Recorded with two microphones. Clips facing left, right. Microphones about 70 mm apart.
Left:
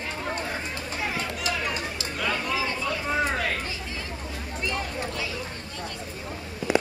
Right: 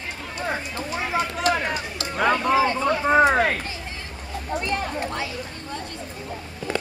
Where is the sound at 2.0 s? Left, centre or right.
Right.